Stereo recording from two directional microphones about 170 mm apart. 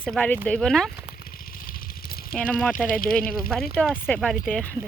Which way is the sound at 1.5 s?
60° left (ahead or behind).